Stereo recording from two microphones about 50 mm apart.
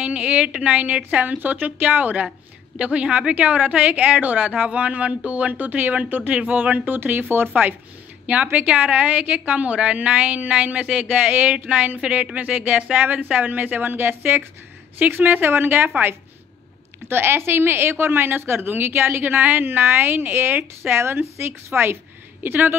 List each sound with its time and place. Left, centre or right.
0.0 s a woman's voice: right
2.8 s a woman's voice: right
8.3 s a woman's voice: right
12.9 s a woman's voice: right
17.1 s a woman's voice: right
21.0 s a woman's voice: right
22.4 s a woman's voice: right